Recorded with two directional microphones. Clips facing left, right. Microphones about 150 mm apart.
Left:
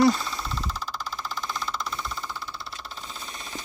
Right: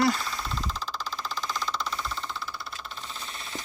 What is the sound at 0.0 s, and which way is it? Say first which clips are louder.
Speech: left 5 dB; 20° left (ahead or behind).